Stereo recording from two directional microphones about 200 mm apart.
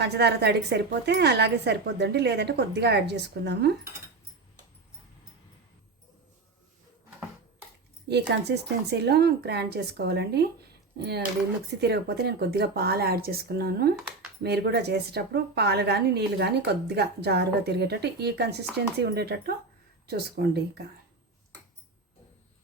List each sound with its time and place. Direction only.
0.0 s a woman's voice: 55° right (ahead or behind)
8.0 s a woman's voice: 55° right (ahead or behind)